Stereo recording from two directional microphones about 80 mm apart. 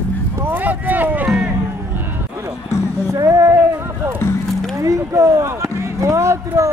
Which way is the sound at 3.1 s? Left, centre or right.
Right.